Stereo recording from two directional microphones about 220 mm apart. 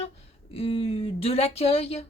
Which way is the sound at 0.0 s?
25° left (ahead or behind).